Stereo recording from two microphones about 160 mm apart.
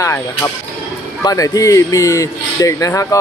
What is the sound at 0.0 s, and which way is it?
Speech, 20° left (ahead or behind).